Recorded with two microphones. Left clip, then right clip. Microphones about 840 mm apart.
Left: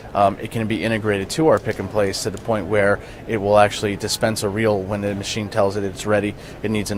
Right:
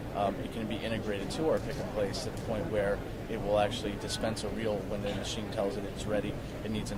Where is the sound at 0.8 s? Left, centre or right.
Left.